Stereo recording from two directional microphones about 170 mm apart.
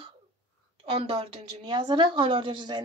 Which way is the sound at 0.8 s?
35° right (ahead or behind).